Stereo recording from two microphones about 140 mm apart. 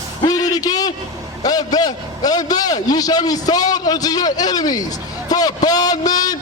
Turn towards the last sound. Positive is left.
turn(degrees=25)  # may be behind; listen again after turning